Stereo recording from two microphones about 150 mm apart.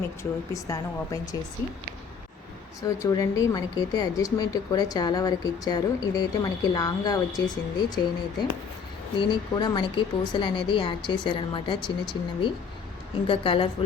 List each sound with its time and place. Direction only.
0.2 s speech: 20° left (ahead or behind)
2.8 s speech: 25° left (ahead or behind)
9.1 s a woman's voice: 30° left (ahead or behind)